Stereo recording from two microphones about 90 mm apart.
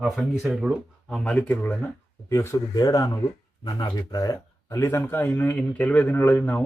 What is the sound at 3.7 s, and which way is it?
Speech, 55° left (ahead or behind).